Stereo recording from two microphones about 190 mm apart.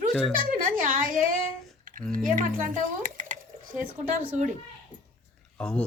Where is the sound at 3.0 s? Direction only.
45° right (ahead or behind).